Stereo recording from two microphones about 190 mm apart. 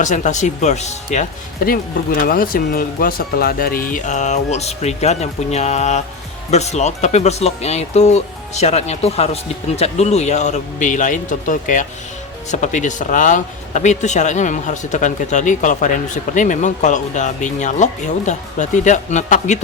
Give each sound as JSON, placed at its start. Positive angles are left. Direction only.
{"t": 0.0, "sound": "speech", "side_deg": 40}